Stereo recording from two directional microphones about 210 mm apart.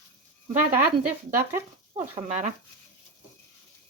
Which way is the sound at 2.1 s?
35° right (ahead or behind).